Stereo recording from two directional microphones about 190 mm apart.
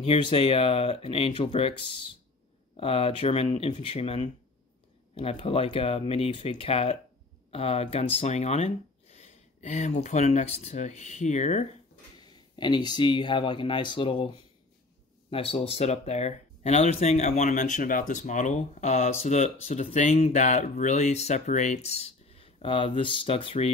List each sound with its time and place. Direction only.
0.0 s speech: 30° left (ahead or behind)
12.2 s speech: 20° left (ahead or behind)